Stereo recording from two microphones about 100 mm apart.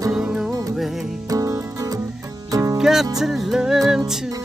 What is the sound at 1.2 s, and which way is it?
Music, 35° right (ahead or behind).